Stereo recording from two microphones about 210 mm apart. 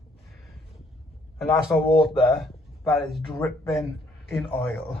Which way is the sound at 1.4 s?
Centre (ahead or behind).